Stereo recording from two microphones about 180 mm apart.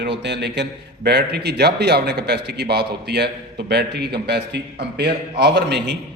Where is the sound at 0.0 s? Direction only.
70° right (ahead or behind).